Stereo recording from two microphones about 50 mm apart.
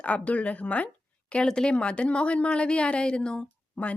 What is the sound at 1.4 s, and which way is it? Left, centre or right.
A woman's voice, centre.